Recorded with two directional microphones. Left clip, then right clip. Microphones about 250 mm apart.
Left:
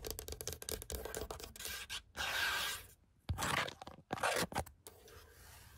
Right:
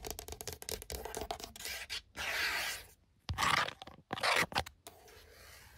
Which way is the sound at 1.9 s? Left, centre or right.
Left.